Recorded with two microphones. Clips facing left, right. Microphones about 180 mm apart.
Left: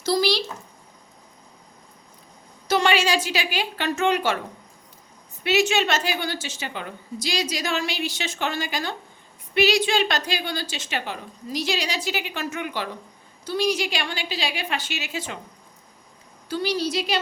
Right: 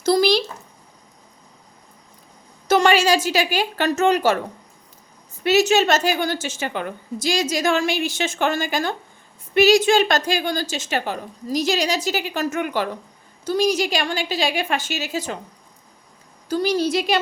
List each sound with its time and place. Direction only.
0.0 s a sound: 50° right (ahead or behind)
2.6 s a woman's voice: 45° right (ahead or behind)
5.4 s a woman's voice: 40° right (ahead or behind)
16.5 s a woman's voice: 45° right (ahead or behind)